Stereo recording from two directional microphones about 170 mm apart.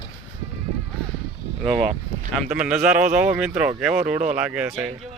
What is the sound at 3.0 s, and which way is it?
Speech, 45° right (ahead or behind).